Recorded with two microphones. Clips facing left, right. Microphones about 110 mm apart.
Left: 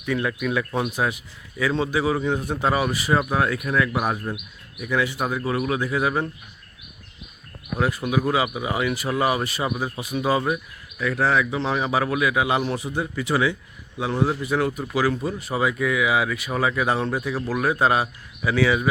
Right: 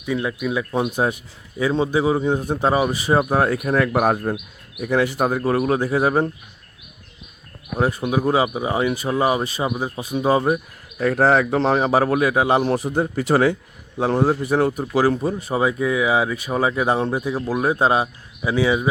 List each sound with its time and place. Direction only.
0.0 s speech: 15° right (ahead or behind); by 4.4 s 50° right (ahead or behind)
4.9 s speech: 40° right (ahead or behind)
7.8 s speech: 25° right (ahead or behind)